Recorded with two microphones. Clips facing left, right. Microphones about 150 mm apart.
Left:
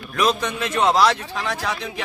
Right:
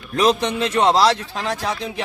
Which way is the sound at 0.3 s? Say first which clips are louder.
Right 7 dB; 25° right (ahead or behind).